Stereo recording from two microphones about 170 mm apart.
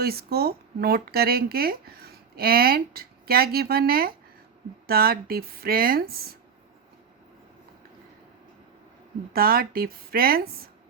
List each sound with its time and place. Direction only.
0.0 s speech: 65° right (ahead or behind)
9.3 s speech: 60° right (ahead or behind)